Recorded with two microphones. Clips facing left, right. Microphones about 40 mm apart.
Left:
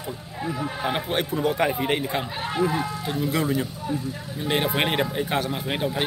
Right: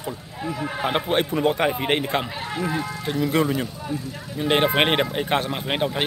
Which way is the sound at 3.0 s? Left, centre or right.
Right.